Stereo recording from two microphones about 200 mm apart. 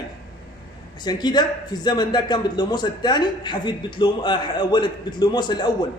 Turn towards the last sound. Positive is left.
turn(degrees=20)  # may be behind; listen again after turning